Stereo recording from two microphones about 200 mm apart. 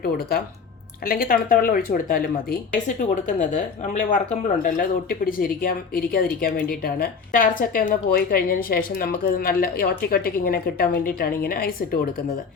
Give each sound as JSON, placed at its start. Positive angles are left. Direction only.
{"t": 0.0, "sound": "speech", "side_deg": 50}